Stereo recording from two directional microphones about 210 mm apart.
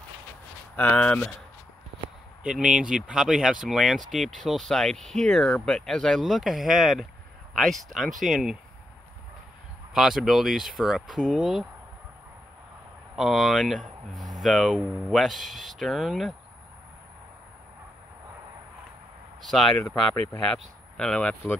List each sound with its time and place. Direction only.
0.7 s speech: 10° left (ahead or behind)
2.4 s speech: 5° right (ahead or behind)
9.9 s speech: centre (ahead or behind)
13.1 s speech: centre (ahead or behind)
19.4 s speech: centre (ahead or behind)